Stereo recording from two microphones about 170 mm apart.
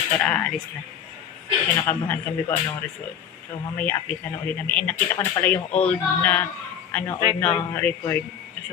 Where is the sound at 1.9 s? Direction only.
10° left (ahead or behind).